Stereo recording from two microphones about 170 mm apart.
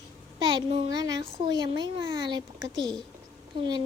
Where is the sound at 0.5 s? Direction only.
25° right (ahead or behind).